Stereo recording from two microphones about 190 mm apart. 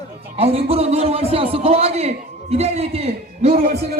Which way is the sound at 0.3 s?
30° right (ahead or behind).